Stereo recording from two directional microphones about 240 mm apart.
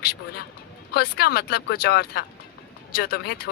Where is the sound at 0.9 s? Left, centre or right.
Left.